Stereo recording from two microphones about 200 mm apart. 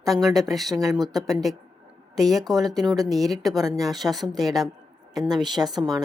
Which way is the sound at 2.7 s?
20° right (ahead or behind).